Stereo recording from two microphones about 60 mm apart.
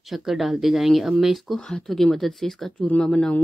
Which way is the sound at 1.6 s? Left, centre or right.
Centre.